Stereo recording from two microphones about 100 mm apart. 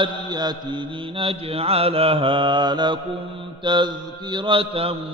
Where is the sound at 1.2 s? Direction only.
70° right (ahead or behind).